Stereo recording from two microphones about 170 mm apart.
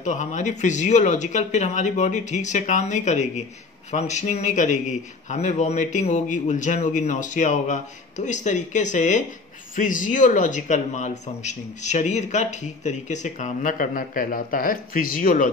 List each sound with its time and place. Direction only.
0.0 s speech: 45° left (ahead or behind)